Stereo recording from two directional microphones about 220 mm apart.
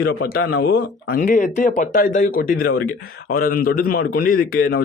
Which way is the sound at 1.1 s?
35° left (ahead or behind).